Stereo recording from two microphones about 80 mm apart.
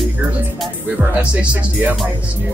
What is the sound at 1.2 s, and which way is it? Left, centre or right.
Speech, centre.